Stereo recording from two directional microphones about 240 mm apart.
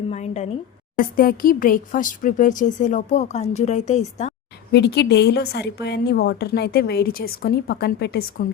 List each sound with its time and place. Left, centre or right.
0.1 s speech: left
4.7 s a woman's voice: left